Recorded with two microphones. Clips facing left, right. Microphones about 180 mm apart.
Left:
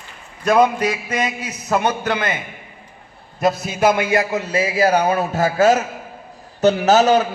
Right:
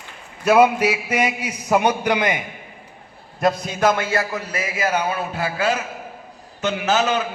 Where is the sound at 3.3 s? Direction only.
5° left (ahead or behind).